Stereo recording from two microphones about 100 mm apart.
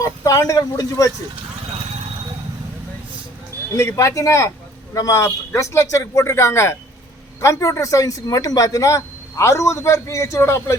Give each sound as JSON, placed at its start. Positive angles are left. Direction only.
{"t": 0.0, "sound": "speech", "side_deg": 35}
{"t": 3.7, "sound": "a woman's voice", "side_deg": 30}